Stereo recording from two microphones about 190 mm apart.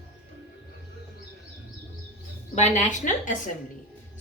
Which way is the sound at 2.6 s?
40° left (ahead or behind).